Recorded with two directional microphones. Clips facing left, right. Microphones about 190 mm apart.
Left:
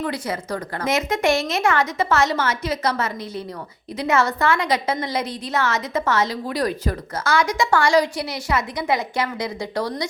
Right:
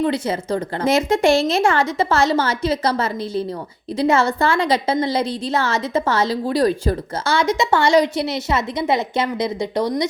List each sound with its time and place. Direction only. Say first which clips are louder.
0.0 s a woman's voice: right 6 dB; 25° right (ahead or behind)